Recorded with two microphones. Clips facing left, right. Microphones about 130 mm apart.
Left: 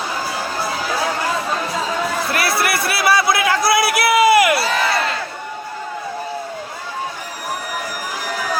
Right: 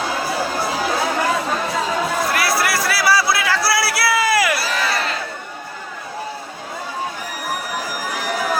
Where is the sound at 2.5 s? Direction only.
25° left (ahead or behind).